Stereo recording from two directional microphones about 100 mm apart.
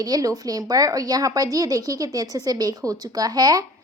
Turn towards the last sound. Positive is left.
turn(degrees=-40)  # may be behind; listen again after turning